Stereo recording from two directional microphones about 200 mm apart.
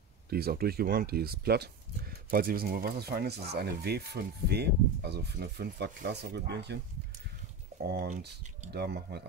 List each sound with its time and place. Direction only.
0.3 s speech: 50° right (ahead or behind)
7.8 s speech: 55° right (ahead or behind)